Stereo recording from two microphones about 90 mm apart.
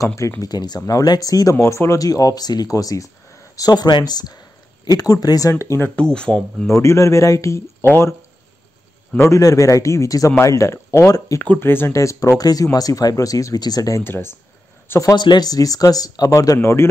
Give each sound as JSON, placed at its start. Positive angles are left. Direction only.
{"t": 0.0, "sound": "speech", "side_deg": 35}
{"t": 0.4, "sound": "speech", "side_deg": 50}
{"t": 5.9, "sound": "speech", "side_deg": 10}
{"t": 6.8, "sound": "speech", "side_deg": 35}
{"t": 9.2, "sound": "speech", "side_deg": 35}
{"t": 11.4, "sound": "speech", "side_deg": 20}
{"t": 14.0, "sound": "speech", "side_deg": 25}
{"t": 15.1, "sound": "speech", "side_deg": 55}